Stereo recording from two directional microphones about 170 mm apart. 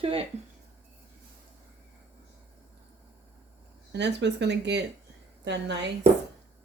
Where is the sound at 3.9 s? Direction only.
90° right.